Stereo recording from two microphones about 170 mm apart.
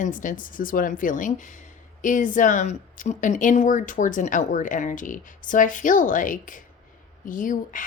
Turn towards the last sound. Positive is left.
turn(degrees=50)  # may be behind; listen again after turning